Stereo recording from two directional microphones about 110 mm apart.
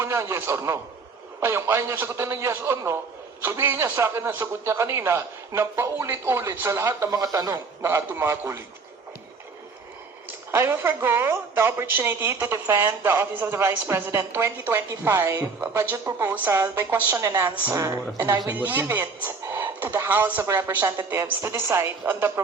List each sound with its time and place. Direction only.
0.0 s a man's voice: 25° right (ahead or behind)
7.8 s a woman's voice: 25° right (ahead or behind)
10.5 s a woman's voice: 20° right (ahead or behind)
18.4 s a woman's voice: 15° right (ahead or behind)